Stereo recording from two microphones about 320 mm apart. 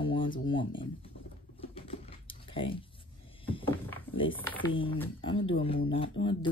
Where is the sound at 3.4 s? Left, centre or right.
Centre.